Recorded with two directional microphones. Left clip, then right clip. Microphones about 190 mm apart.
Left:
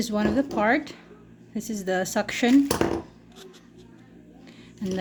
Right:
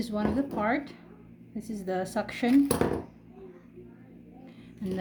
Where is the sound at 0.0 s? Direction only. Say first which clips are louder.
Left 5 dB; 35° left (ahead or behind).